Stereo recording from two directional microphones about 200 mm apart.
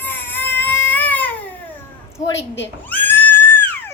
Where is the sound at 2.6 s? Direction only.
10° left (ahead or behind).